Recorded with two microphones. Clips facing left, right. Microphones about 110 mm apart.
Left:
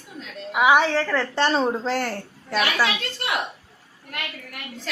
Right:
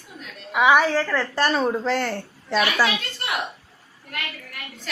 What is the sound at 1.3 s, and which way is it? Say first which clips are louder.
A woman's voice: even; 25° left (ahead or behind).